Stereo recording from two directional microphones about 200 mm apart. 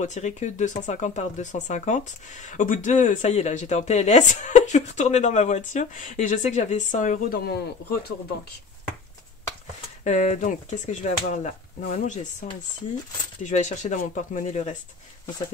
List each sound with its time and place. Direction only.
0.0 s speech: 35° left (ahead or behind)
10.0 s speech: 35° left (ahead or behind)